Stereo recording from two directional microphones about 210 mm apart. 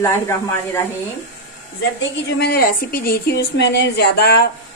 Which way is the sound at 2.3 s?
50° left (ahead or behind).